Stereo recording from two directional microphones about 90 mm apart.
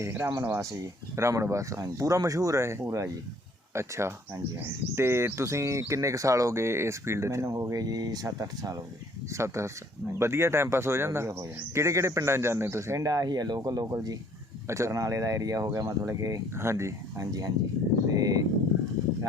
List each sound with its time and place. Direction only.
0.0 s speech: 30° right (ahead or behind); by 14.2 s 45° right (ahead or behind)
14.7 s speech: 35° right (ahead or behind)